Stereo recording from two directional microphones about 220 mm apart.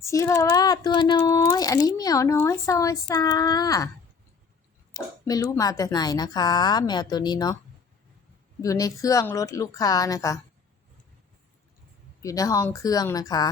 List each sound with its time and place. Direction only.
0.0 s speech: 15° left (ahead or behind)
4.9 s speech: 15° left (ahead or behind)
8.6 s speech: 15° left (ahead or behind)
12.2 s speech: 15° left (ahead or behind)